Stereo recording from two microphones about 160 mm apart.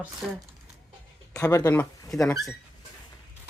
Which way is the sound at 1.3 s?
20° left (ahead or behind).